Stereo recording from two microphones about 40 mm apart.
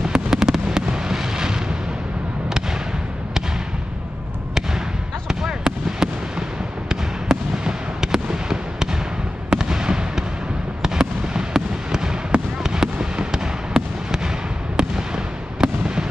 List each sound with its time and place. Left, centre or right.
0.0 s fireworks: centre
5.3 s fireworks: centre